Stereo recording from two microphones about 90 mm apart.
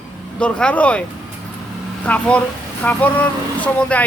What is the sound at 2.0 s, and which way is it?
A man's voice, 15° left (ahead or behind).